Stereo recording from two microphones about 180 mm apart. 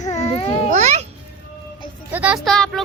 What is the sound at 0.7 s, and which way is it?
Speech, 40° right (ahead or behind).